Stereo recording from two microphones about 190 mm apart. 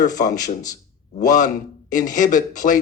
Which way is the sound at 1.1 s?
40° left (ahead or behind).